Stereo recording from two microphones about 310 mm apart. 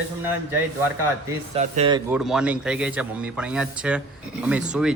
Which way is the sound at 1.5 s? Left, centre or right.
Centre.